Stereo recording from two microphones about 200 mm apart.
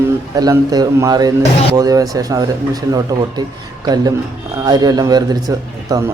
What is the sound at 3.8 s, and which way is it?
Speech, 20° right (ahead or behind).